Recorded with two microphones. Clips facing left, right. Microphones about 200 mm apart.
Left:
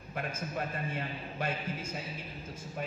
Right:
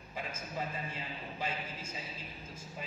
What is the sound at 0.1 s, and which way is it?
A man's voice, 65° left (ahead or behind).